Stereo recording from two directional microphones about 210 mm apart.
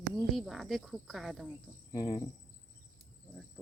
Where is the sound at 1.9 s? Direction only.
20° left (ahead or behind).